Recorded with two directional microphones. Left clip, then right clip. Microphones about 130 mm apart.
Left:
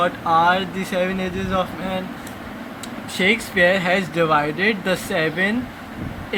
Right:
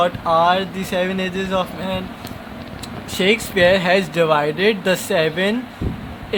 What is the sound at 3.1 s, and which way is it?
Speech, 50° right (ahead or behind).